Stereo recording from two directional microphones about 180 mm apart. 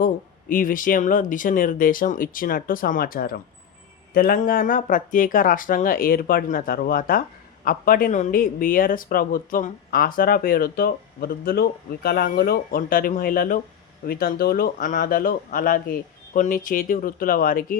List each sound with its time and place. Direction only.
0.0 s speech: 50° left (ahead or behind)